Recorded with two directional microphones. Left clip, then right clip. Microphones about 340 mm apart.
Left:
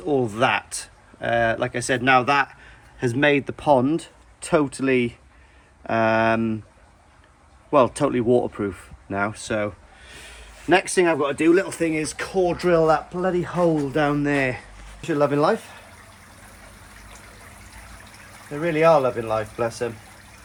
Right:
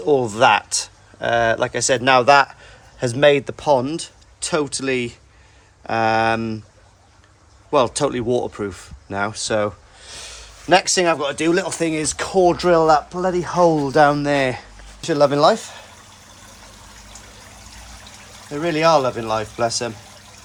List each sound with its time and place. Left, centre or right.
0.0 s speech: centre
7.7 s speech: centre
18.5 s speech: centre